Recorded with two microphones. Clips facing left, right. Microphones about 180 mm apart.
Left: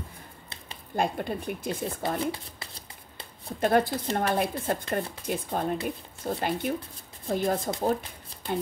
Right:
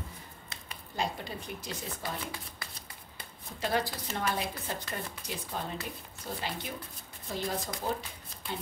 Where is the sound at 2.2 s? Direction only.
30° left (ahead or behind).